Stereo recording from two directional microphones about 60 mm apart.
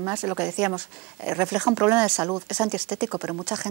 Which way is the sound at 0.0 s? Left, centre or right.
Right.